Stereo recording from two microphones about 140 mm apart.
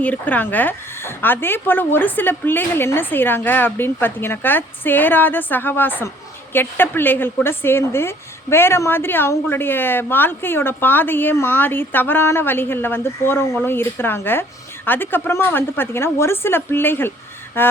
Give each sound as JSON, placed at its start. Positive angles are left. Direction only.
{"t": 0.0, "sound": "a woman's voice", "side_deg": 10}